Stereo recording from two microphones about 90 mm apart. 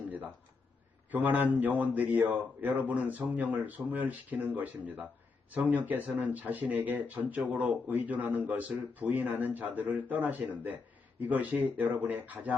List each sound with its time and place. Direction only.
1.1 s a man's voice: 20° right (ahead or behind)
11.8 s speech: 20° right (ahead or behind)